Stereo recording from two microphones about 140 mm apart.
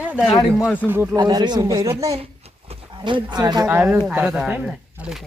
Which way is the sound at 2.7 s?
35° right (ahead or behind).